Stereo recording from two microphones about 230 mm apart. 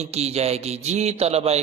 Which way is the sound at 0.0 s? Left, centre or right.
Right.